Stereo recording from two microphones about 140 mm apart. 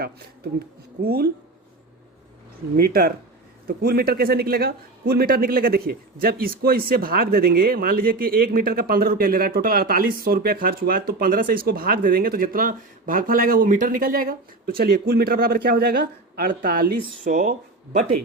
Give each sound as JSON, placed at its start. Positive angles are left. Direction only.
{"t": 1.0, "sound": "a man's voice", "side_deg": -90}
{"t": 2.7, "sound": "a man's voice", "side_deg": -90}